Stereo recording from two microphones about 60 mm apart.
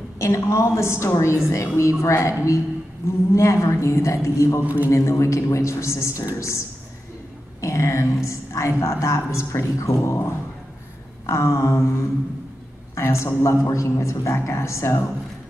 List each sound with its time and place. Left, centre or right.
0.2 s a man's voice: left
7.6 s a man's voice: left